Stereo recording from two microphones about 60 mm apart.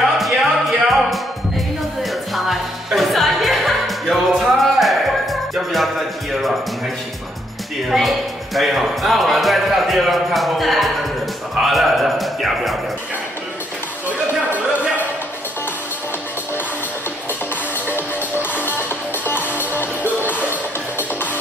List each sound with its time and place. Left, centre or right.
0.0 s music: centre
7.9 s music: centre
8.5 s speech: centre
17.8 s music: left